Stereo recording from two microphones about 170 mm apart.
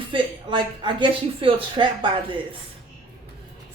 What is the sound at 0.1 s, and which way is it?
A woman's voice, 25° right (ahead or behind).